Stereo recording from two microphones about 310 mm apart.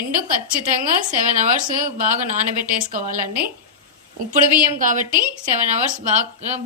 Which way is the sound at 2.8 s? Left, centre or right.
Right.